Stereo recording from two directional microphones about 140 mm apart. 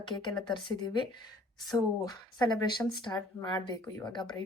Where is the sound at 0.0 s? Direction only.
35° left (ahead or behind).